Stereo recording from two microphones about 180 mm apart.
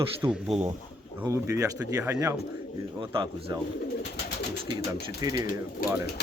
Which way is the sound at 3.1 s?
30° right (ahead or behind).